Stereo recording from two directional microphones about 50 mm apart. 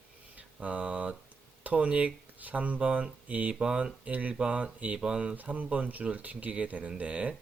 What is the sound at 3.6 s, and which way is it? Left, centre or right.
Speech, centre.